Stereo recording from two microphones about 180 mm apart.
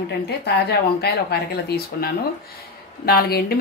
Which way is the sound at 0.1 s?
65° left (ahead or behind).